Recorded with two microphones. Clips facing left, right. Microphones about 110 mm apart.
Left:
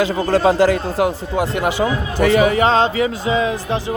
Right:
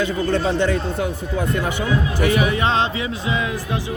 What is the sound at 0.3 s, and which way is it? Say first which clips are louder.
Speech: left 8 dB; 90° left.